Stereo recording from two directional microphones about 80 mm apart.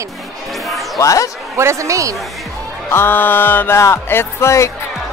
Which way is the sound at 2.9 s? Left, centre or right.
Left.